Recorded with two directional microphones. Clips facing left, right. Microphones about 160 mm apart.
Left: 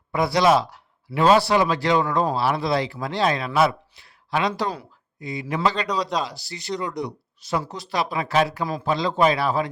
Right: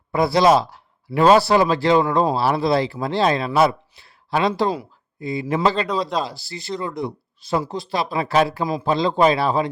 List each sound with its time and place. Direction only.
0.1 s a man's voice: 30° right (ahead or behind)
5.9 s speech: centre (ahead or behind)
7.8 s a man's voice: 25° right (ahead or behind)